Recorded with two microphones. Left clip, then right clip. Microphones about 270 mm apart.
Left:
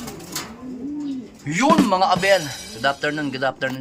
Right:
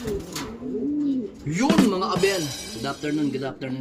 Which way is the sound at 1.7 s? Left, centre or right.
Centre.